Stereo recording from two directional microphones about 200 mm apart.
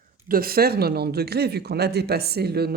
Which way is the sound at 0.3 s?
50° right (ahead or behind).